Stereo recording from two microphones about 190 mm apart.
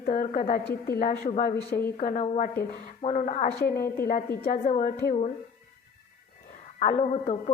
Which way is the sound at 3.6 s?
55° left (ahead or behind).